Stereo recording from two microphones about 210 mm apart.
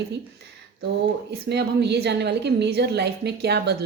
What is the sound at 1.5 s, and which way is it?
A woman's voice, 55° right (ahead or behind).